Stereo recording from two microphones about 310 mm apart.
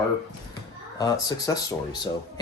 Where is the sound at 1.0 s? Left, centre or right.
Centre.